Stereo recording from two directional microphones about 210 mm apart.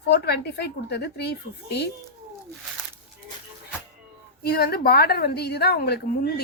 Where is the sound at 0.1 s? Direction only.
50° left (ahead or behind).